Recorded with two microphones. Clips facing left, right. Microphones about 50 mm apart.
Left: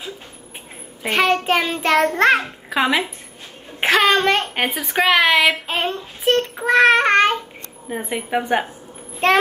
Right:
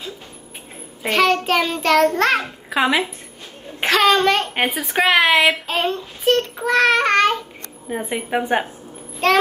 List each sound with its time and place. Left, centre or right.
1.0 s a child's voice: centre
2.4 s a child's voice: centre
3.8 s a child's voice: centre
5.7 s a child's voice: centre
6.3 s a child's voice: left
7.9 s a woman's voice: centre